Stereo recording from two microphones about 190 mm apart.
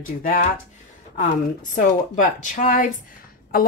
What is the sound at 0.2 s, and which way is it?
Speech, 45° left (ahead or behind).